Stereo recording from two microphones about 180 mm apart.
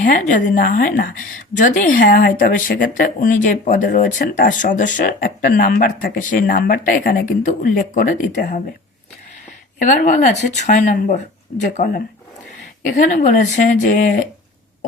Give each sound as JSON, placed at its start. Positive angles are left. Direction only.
{"t": 0.0, "sound": "speech", "side_deg": 45}
{"t": 9.7, "sound": "speech", "side_deg": 45}